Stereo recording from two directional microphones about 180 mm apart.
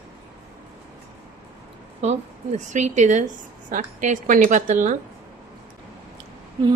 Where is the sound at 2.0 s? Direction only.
40° right (ahead or behind).